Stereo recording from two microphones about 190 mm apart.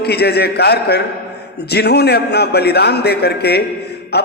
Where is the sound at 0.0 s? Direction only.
60° left (ahead or behind).